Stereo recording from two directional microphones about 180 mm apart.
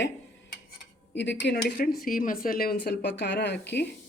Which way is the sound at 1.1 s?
80° left.